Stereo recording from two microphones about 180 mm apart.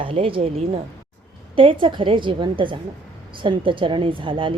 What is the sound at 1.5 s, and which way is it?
A woman's voice, 30° right (ahead or behind).